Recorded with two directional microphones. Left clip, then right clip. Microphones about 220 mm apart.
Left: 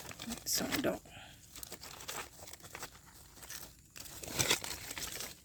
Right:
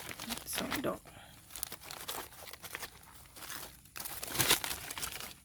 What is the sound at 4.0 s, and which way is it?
Crumpling, 30° right (ahead or behind).